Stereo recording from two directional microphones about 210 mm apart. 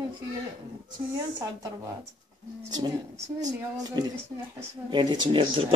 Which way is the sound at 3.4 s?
15° right (ahead or behind).